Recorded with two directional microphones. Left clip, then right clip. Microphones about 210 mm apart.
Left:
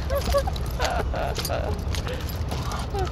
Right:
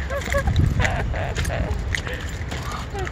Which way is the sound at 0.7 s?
5° left (ahead or behind).